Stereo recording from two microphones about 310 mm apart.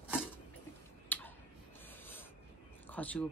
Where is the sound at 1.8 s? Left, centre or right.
Centre.